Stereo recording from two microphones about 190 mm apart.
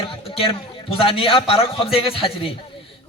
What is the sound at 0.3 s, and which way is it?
A man's voice, 30° left (ahead or behind).